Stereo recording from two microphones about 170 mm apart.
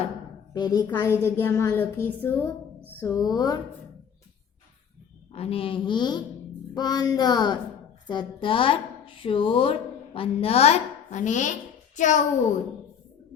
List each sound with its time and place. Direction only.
0.5 s a woman's voice: 25° left (ahead or behind)
1.0 s a woman's voice: 15° left (ahead or behind)
5.3 s a woman's voice: 35° left (ahead or behind)